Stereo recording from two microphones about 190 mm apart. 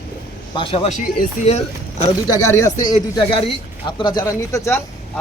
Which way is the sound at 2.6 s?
20° left (ahead or behind).